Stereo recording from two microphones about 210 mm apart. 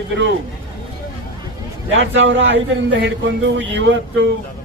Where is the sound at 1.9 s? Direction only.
60° right (ahead or behind).